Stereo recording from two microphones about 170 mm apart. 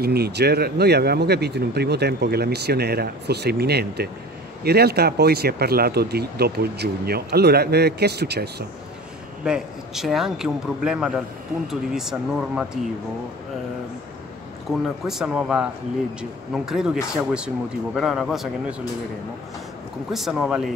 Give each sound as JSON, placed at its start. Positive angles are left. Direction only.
{"t": 0.0, "sound": "speech", "side_deg": -70}
{"t": 9.4, "sound": "a man's voice", "side_deg": -5}
{"t": 14.7, "sound": "a man's voice", "side_deg": 0}
{"t": 20.1, "sound": "a man's voice", "side_deg": 0}